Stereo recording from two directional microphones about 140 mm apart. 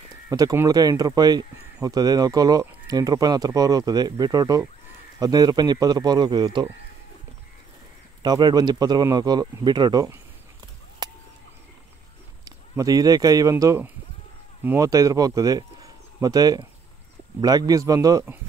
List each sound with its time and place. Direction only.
0.3 s speech: 25° right (ahead or behind)
8.2 s speech: 30° right (ahead or behind)
11.0 s a sound: 30° right (ahead or behind)
12.4 s speech: 25° right (ahead or behind)